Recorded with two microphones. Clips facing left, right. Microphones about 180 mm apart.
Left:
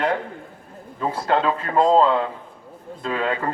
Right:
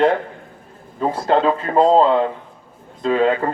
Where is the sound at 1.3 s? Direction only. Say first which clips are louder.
Right 4 dB; 30° right (ahead or behind).